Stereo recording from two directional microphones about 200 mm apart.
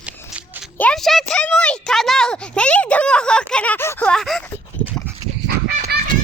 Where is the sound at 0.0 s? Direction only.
5° right (ahead or behind).